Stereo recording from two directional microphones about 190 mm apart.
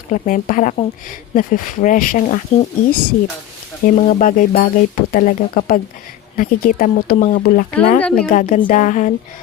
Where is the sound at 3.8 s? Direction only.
45° left (ahead or behind).